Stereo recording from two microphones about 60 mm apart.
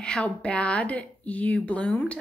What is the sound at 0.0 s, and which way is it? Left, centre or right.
A woman's voice, centre.